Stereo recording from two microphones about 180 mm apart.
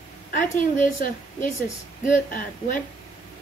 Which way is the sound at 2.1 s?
50° left (ahead or behind).